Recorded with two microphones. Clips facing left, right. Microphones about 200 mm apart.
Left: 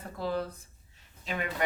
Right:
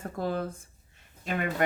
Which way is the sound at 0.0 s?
50° right (ahead or behind).